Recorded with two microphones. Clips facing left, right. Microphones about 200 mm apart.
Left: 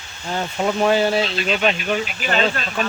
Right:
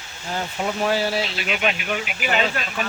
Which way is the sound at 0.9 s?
25° left (ahead or behind).